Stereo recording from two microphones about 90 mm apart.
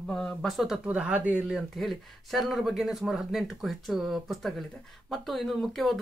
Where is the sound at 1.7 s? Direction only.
Centre (ahead or behind).